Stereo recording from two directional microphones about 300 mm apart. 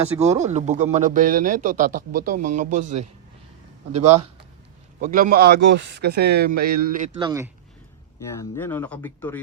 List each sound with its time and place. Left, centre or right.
0.4 s speech: right
3.9 s speech: right
4.9 s speech: right
7.2 s speech: centre
8.4 s speech: centre